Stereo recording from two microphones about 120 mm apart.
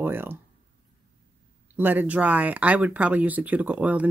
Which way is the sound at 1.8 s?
15° right (ahead or behind).